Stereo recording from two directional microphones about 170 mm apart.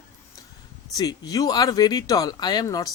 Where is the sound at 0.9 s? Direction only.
20° left (ahead or behind).